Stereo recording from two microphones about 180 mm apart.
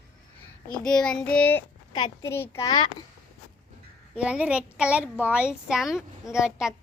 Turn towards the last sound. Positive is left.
turn(degrees=-5)  # may be behind; listen again after turning